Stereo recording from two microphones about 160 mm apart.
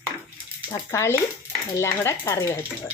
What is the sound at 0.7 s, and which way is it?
Speech, 15° left (ahead or behind).